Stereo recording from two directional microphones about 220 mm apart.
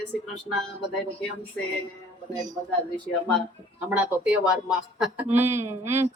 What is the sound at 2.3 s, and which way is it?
Speech, 15° right (ahead or behind).